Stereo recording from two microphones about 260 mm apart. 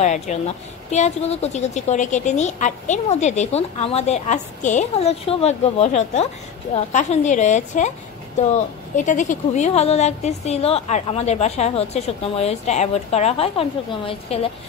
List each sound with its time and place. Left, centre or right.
0.0 s a woman's voice: left
8.9 s a woman's voice: left